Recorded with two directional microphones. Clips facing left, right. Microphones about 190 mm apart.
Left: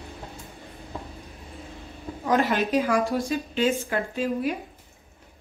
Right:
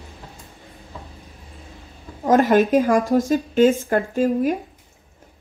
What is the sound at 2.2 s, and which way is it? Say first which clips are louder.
A woman's voice: right 8 dB; 50° right (ahead or behind).